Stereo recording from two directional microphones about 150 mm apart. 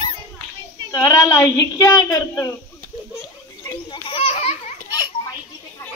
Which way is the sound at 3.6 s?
25° left (ahead or behind).